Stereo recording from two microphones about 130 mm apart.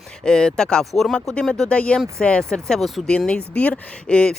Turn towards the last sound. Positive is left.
turn(degrees=10)  # may be behind; listen again after turning